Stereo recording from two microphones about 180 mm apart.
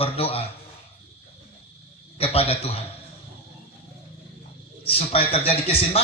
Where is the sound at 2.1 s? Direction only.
35° left (ahead or behind).